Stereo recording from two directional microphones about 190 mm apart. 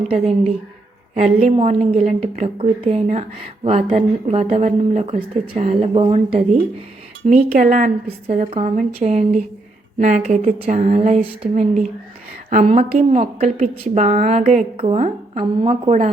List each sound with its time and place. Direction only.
0.1 s a woman's voice: 35° right (ahead or behind)
7.3 s a woman's voice: 40° right (ahead or behind)